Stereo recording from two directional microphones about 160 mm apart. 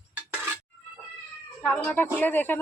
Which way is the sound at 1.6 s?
10° left (ahead or behind).